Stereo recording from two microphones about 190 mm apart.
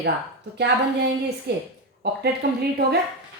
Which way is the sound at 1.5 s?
60° right (ahead or behind).